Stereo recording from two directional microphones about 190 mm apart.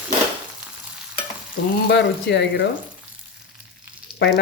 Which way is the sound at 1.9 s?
60° left (ahead or behind).